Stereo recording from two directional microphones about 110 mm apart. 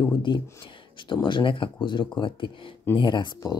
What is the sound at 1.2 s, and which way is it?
Speech, 50° left (ahead or behind).